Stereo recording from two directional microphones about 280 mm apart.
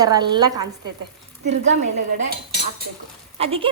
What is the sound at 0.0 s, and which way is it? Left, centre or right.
Speech, centre.